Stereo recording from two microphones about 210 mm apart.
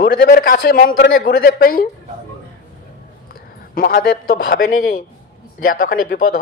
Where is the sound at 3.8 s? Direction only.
45° left (ahead or behind).